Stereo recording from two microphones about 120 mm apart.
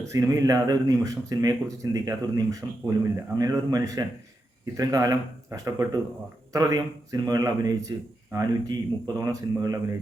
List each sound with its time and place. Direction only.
0.0 s a man's voice: 30° right (ahead or behind)